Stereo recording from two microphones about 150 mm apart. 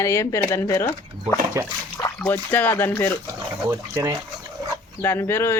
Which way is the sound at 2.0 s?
20° left (ahead or behind).